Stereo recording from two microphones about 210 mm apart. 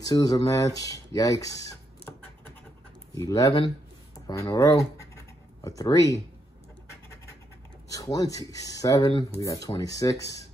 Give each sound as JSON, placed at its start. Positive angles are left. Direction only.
{"t": 0.0, "sound": "speech", "side_deg": 20}
{"t": 3.2, "sound": "speech", "side_deg": 15}
{"t": 7.9, "sound": "speech", "side_deg": 15}